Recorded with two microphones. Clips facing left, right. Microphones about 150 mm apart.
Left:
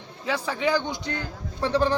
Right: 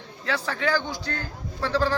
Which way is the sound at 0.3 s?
10° left (ahead or behind).